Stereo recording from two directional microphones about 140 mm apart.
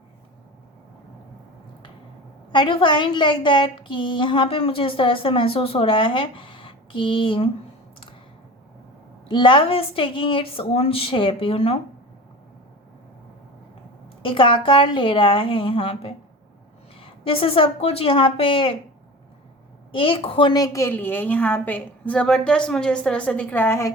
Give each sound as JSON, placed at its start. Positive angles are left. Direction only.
{"t": 2.5, "sound": "a woman's voice", "side_deg": 35}
{"t": 9.3, "sound": "a woman's voice", "side_deg": 35}
{"t": 14.2, "sound": "a woman's voice", "side_deg": 40}
{"t": 19.9, "sound": "a woman's voice", "side_deg": 40}